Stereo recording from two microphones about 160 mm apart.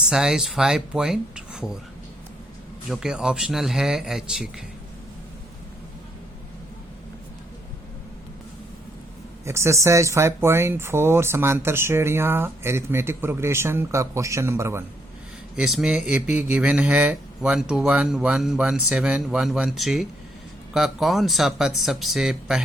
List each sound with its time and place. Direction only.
0.1 s speech: 5° right (ahead or behind)
2.9 s speech: 5° right (ahead or behind)
9.5 s speech: 15° right (ahead or behind)
15.5 s speech: 5° right (ahead or behind)